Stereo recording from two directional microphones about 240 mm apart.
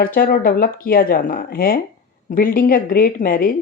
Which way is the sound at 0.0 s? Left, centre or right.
Left.